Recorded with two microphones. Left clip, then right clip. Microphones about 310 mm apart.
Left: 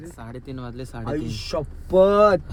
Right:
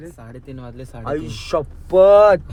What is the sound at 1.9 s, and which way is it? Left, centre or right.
Speech, centre.